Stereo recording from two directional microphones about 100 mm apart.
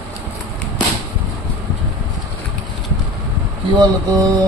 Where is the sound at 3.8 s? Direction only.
40° right (ahead or behind).